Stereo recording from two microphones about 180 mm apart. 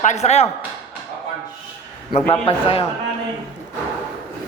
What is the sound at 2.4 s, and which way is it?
Speech, 30° left (ahead or behind).